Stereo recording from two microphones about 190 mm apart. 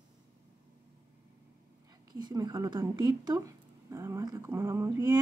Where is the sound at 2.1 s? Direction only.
20° right (ahead or behind).